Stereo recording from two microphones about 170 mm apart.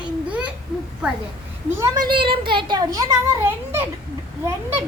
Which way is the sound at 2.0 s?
30° right (ahead or behind).